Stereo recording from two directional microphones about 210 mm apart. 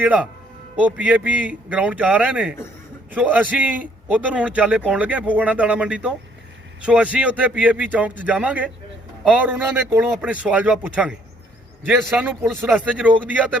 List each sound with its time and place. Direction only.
0.0 s a man's voice: 5° right (ahead or behind)